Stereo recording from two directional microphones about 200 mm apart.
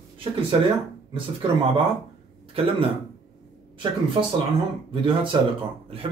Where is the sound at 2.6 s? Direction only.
30° right (ahead or behind).